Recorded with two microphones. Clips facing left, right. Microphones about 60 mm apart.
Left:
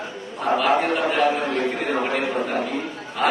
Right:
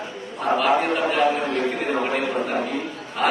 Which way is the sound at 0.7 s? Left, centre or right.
Right.